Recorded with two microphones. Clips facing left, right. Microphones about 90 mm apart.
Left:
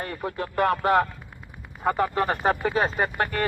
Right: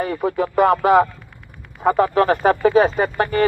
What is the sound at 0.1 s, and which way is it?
Speech, 90° right.